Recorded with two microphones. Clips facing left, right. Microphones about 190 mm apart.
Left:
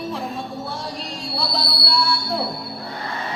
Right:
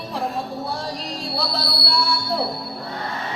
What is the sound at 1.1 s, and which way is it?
Music, centre (ahead or behind).